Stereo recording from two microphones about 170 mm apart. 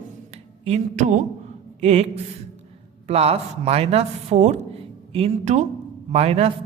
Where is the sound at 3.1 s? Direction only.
35° right (ahead or behind).